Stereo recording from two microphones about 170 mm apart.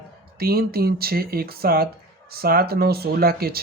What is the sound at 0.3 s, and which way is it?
Speech, 65° right (ahead or behind).